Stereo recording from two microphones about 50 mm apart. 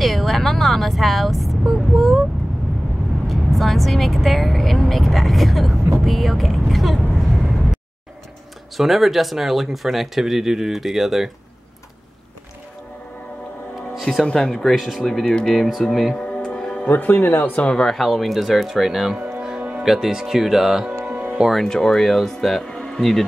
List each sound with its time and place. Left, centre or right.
0.0 s vehicle: centre
3.3 s speech: centre
14.2 s speech: centre
15.0 s speech: centre
16.2 s music: centre
16.8 s speech: left
17.8 s speech: centre
21.1 s music: right
21.5 s speech: centre
22.7 s a sound: centre
22.9 s speech: centre